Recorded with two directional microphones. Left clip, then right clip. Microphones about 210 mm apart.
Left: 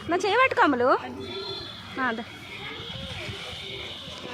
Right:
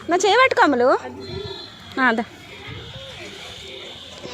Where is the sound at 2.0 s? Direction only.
35° right (ahead or behind).